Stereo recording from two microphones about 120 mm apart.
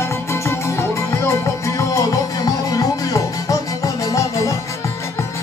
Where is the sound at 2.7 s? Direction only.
30° left (ahead or behind).